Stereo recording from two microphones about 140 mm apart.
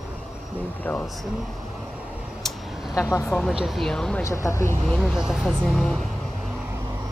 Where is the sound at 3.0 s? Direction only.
20° left (ahead or behind).